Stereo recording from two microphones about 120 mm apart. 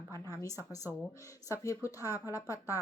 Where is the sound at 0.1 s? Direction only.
25° left (ahead or behind).